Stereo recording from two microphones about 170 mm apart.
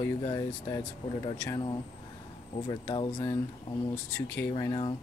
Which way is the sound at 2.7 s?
30° left (ahead or behind).